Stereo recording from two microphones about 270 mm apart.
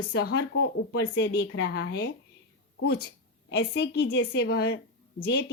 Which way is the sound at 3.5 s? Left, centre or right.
Left.